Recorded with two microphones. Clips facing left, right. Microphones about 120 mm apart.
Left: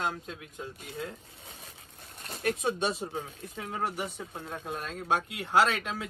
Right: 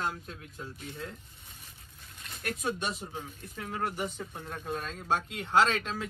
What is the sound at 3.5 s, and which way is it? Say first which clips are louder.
Speech: left 1 dB; 15° left (ahead or behind).